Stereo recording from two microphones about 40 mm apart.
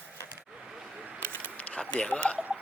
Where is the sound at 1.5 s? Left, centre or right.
Left.